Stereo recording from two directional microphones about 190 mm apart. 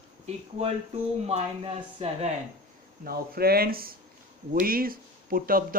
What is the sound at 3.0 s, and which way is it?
Speech, 50° right (ahead or behind).